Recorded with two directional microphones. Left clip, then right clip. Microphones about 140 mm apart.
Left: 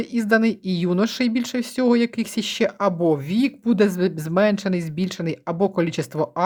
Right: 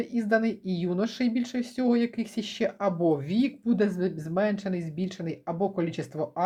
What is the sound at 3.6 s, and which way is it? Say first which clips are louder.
Speech: left 10 dB; 50° left (ahead or behind).